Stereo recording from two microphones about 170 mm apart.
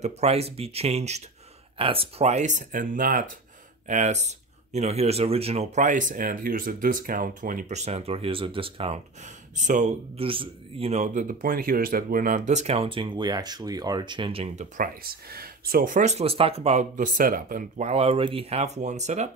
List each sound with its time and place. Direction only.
0.0 s speech: 40° right (ahead or behind)
14.8 s speech: 60° right (ahead or behind); by 19.3 s 40° right (ahead or behind)